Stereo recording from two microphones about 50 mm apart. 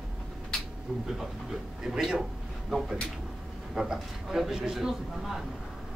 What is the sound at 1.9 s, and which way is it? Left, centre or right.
A man's voice, centre.